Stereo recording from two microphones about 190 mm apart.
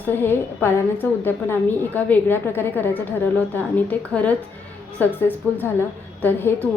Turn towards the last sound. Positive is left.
turn(degrees=10)  # may be behind; listen again after turning